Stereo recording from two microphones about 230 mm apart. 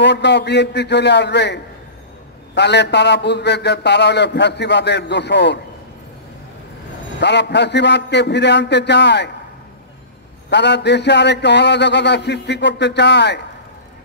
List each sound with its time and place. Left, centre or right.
0.0 s a man's voice: left
7.2 s a man's voice: left
10.5 s a man's voice: left